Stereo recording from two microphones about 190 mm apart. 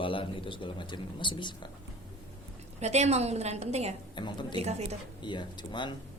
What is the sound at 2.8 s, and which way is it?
A woman's voice, 35° right (ahead or behind).